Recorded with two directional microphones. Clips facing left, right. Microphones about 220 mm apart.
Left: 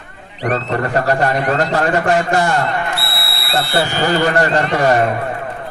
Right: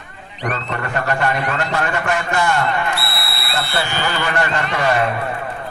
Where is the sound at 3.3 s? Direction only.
25° left (ahead or behind).